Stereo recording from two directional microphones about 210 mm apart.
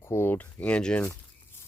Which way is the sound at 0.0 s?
10° left (ahead or behind).